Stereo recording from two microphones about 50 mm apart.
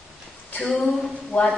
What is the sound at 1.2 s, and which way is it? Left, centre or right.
Speech, left.